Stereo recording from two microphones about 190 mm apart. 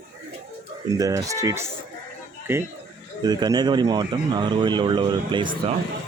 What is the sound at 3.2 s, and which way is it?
Speech, 20° right (ahead or behind).